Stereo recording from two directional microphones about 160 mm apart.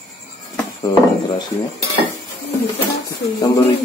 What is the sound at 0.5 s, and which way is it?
Dishes, 20° left (ahead or behind).